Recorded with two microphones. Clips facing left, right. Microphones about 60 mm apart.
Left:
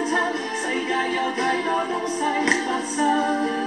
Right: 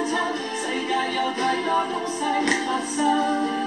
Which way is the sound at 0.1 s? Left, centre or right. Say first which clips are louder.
Left 2 dB; left.